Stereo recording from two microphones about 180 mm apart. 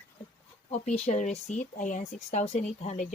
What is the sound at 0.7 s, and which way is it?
Speech, 40° left (ahead or behind).